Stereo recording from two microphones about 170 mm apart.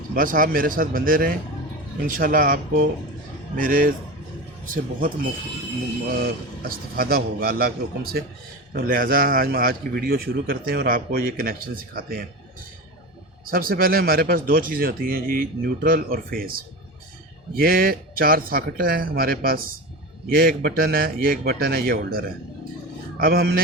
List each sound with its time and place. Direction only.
0.1 s a man's voice: 55° right (ahead or behind)
13.5 s a man's voice: 60° right (ahead or behind)